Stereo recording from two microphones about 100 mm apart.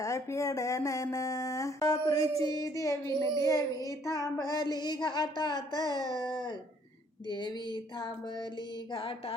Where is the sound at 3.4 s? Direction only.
30° left (ahead or behind).